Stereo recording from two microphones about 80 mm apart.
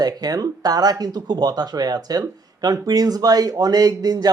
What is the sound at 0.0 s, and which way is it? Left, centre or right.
A man's voice, right.